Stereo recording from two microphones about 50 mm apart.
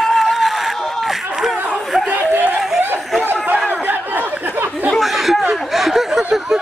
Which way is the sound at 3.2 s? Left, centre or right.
Right.